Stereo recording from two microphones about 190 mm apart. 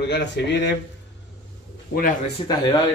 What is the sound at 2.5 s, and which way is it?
Speech, 20° left (ahead or behind).